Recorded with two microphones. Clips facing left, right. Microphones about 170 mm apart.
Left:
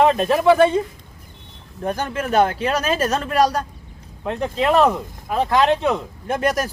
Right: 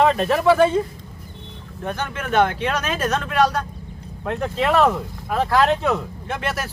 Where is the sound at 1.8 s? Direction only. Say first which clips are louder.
Left 4 dB; 35° left (ahead or behind).